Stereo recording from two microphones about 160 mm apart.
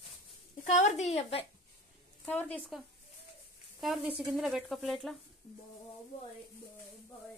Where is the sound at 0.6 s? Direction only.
45° left (ahead or behind).